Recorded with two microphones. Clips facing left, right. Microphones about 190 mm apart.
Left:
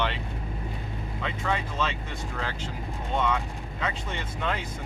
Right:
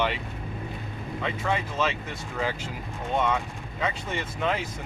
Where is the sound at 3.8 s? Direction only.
10° right (ahead or behind).